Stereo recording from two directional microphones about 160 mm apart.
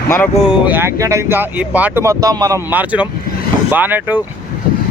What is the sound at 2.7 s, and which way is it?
Speech, 10° right (ahead or behind).